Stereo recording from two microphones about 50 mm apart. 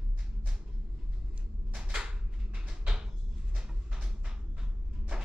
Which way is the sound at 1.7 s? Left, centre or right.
Centre.